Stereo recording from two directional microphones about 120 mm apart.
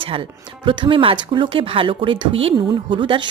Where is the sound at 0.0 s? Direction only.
45° right (ahead or behind).